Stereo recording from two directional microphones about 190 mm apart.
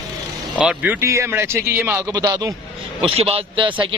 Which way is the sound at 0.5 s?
10° right (ahead or behind).